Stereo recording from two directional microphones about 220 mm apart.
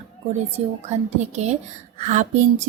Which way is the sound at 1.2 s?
30° right (ahead or behind).